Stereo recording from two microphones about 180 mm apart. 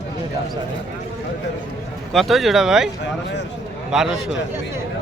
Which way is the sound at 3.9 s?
5° right (ahead or behind).